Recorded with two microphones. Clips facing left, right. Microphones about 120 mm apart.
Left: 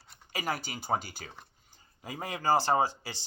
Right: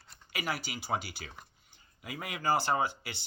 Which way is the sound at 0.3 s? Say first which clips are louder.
Left 2 dB; 45° left (ahead or behind).